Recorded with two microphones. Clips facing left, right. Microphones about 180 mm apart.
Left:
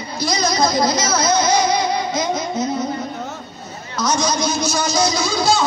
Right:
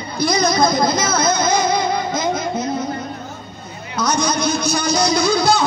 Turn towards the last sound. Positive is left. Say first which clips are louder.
# right 3 dB
turn(degrees=-55)  # may be behind; listen again after turning